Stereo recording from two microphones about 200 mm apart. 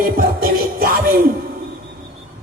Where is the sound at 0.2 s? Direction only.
45° right (ahead or behind).